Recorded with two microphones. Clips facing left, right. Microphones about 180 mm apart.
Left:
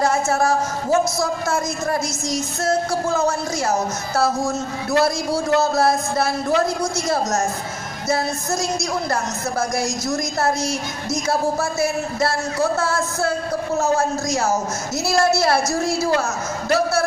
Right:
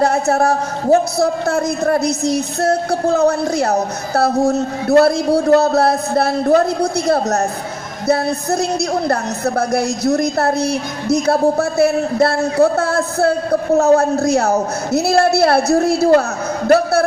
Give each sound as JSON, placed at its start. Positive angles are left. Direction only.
{"t": 0.0, "sound": "a woman's voice", "side_deg": -60}